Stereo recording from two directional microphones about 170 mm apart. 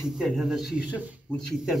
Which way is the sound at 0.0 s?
Centre (ahead or behind).